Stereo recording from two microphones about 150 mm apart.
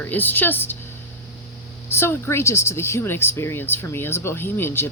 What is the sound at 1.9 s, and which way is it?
Speech, 15° left (ahead or behind).